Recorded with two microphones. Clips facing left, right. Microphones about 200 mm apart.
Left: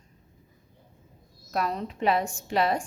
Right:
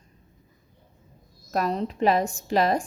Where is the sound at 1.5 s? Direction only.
35° right (ahead or behind).